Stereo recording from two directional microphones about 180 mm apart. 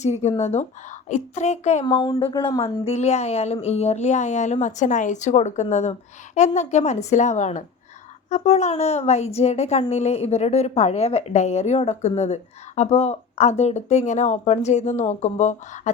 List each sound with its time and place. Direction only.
0.0 s a woman's voice: 40° left (ahead or behind)
1.8 s speech: 25° left (ahead or behind)
2.8 s a woman's voice: 35° left (ahead or behind)